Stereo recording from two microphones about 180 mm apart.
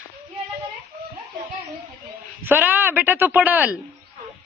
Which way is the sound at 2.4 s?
10° right (ahead or behind).